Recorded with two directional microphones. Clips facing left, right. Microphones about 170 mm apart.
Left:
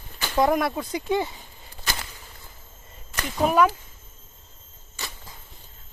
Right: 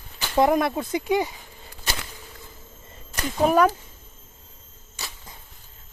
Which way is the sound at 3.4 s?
40° right (ahead or behind).